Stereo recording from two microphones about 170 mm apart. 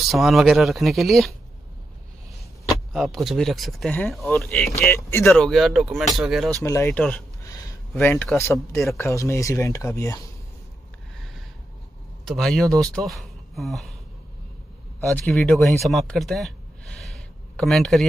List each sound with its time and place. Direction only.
0.1 s speech: centre (ahead or behind)
2.9 s speech: centre (ahead or behind); by 5.2 s 15° left (ahead or behind)
5.2 s speech: 5° left (ahead or behind)
6.6 s speech: 15° left (ahead or behind)
7.4 s a sound: 20° left (ahead or behind)
7.9 s speech: 10° left (ahead or behind)
12.3 s speech: centre (ahead or behind)
15.1 s speech: 5° left (ahead or behind)